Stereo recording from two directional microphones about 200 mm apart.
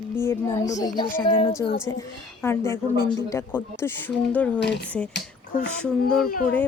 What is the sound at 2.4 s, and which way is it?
Speech, 15° left (ahead or behind).